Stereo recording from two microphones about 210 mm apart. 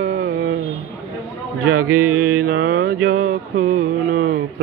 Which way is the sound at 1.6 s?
90° right.